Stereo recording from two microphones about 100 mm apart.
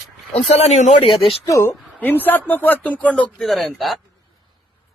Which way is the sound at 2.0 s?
20° left (ahead or behind).